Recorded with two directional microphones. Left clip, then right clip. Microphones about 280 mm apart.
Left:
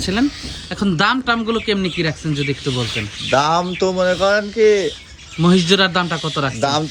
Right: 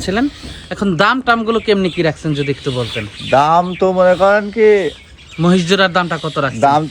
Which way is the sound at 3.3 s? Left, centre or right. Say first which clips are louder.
Right 5 dB; right.